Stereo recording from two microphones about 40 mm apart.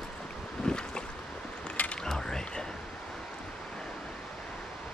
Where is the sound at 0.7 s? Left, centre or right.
Left.